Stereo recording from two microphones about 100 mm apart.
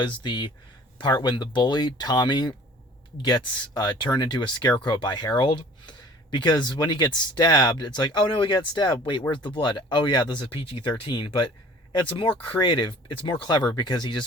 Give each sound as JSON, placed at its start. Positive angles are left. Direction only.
{"t": 0.0, "sound": "speech", "side_deg": 50}